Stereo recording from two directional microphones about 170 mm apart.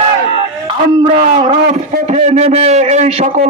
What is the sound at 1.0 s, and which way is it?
A man's voice, 45° right (ahead or behind).